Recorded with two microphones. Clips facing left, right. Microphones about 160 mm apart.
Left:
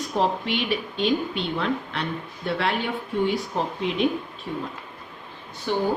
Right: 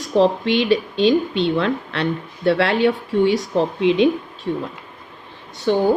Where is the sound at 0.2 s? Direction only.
85° right.